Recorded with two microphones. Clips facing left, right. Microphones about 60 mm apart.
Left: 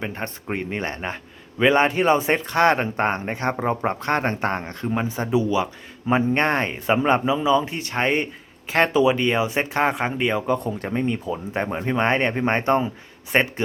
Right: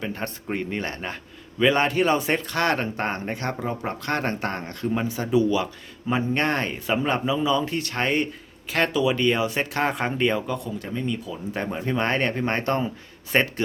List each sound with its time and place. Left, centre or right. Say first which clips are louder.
0.0 s a man's voice: left 1 dB; left
9.9 s speech: left 1 dB; centre
10.4 s a man's voice: left 6 dB; left; by 13.5 s centre